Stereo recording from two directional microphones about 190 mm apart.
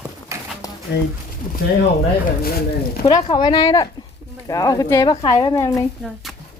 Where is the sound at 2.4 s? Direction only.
50° left (ahead or behind).